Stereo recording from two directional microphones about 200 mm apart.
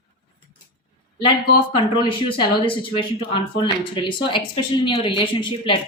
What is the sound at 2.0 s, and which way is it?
Speech, 25° left (ahead or behind).